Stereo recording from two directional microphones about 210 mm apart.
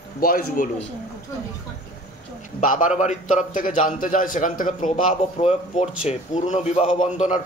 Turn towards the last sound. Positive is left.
turn(degrees=30)  # may be behind; listen again after turning